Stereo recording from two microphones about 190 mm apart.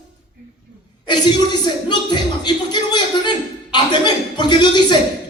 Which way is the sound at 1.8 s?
25° left (ahead or behind).